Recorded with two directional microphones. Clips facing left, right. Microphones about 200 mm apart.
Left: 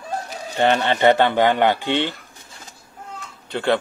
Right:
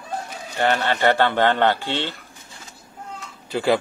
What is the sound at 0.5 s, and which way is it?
Speech, 20° left (ahead or behind).